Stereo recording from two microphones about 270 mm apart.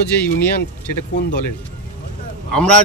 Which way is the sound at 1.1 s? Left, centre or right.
Left.